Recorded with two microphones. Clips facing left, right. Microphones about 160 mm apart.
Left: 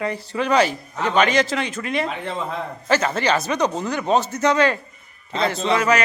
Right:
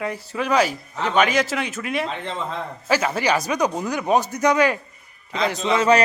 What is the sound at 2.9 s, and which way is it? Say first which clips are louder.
Speech: left 1 dB; 10° right (ahead or behind).